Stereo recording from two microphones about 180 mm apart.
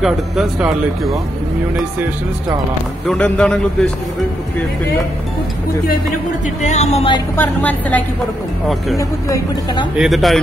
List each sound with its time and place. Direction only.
0.0 s a man's voice: 5° right (ahead or behind)
3.1 s a man's voice: 5° left (ahead or behind)
6.6 s a woman's voice: 40° left (ahead or behind)
7.3 s speech: 10° left (ahead or behind)
9.9 s a man's voice: centre (ahead or behind)